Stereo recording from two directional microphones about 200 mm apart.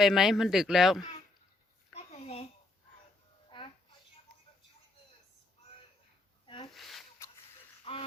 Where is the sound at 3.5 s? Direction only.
25° left (ahead or behind).